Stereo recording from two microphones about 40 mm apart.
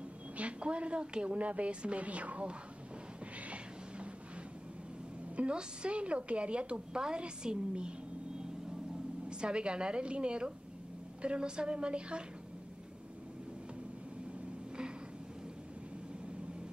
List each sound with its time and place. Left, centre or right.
0.4 s a woman's voice: right
3.3 s a sound: right
5.3 s a woman's voice: right
9.3 s a woman's voice: right